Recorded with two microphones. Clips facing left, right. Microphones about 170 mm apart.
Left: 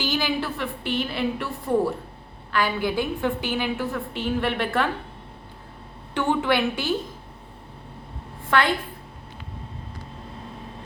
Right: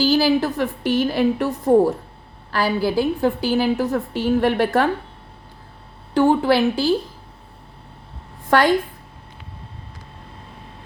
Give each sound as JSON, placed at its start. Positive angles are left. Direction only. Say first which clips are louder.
{"t": 0.0, "sound": "a woman's voice", "louder": "right 9 dB", "side_deg": -35}
{"t": 6.1, "sound": "a woman's voice", "louder": "right 7 dB", "side_deg": -35}
{"t": 8.4, "sound": "a woman's voice", "louder": "right 5 dB", "side_deg": -40}